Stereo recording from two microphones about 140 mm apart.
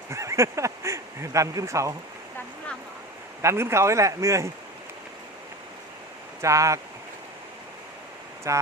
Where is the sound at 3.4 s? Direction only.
20° right (ahead or behind).